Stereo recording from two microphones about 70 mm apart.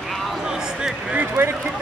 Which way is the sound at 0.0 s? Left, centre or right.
Centre.